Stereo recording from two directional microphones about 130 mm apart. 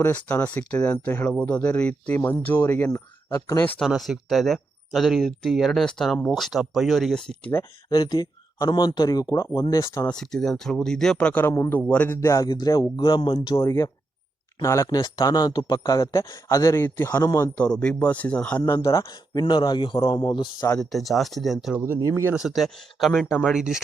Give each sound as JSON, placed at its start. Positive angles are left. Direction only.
{"t": 0.0, "sound": "speech", "side_deg": 10}
{"t": 3.3, "sound": "speech", "side_deg": 30}
{"t": 3.8, "sound": "speech", "side_deg": 0}
{"t": 7.9, "sound": "a man's voice", "side_deg": 30}
{"t": 10.0, "sound": "speech", "side_deg": 5}
{"t": 13.6, "sound": "speech", "side_deg": 25}
{"t": 17.6, "sound": "speech", "side_deg": 10}
{"t": 18.6, "sound": "speech", "side_deg": 25}
{"t": 20.7, "sound": "speech", "side_deg": 0}
{"t": 21.9, "sound": "speech", "side_deg": -20}
{"t": 22.4, "sound": "speech", "side_deg": 0}